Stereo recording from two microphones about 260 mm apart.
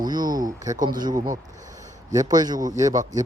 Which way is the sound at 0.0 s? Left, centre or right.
Centre.